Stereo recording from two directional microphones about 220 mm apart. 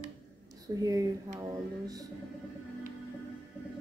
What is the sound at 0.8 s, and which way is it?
Speech, 15° right (ahead or behind).